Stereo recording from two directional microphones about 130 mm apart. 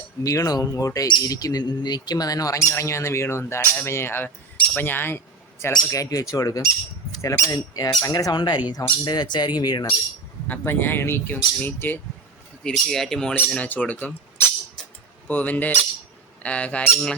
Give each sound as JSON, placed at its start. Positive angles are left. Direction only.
{"t": 0.2, "sound": "speech", "side_deg": 25}
{"t": 10.4, "sound": "speech", "side_deg": 15}
{"t": 12.6, "sound": "speech", "side_deg": 0}
{"t": 15.3, "sound": "speech", "side_deg": 15}